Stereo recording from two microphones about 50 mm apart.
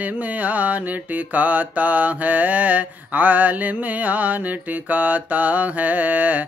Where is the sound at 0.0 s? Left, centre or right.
Right.